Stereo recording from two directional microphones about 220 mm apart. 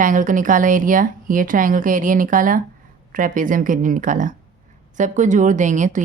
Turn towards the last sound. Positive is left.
turn(degrees=-35)  # may be behind; listen again after turning